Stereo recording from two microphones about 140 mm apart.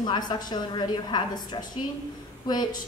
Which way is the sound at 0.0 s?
30° left (ahead or behind).